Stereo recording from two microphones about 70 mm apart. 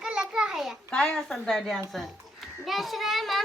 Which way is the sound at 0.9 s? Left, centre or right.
Centre.